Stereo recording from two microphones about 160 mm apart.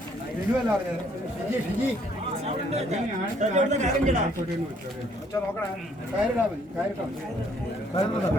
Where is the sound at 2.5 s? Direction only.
40° right (ahead or behind).